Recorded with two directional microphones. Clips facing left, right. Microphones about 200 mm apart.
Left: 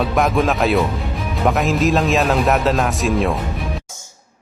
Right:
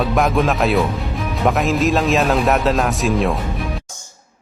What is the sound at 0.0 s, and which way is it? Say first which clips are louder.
A man's voice: even; centre (ahead or behind).